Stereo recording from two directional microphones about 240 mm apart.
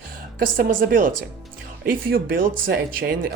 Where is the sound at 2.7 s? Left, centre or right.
Right.